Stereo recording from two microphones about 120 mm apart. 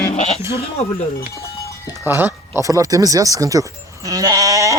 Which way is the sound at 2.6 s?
25° right (ahead or behind).